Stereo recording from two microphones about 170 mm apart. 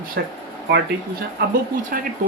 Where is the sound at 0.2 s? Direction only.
75° right (ahead or behind).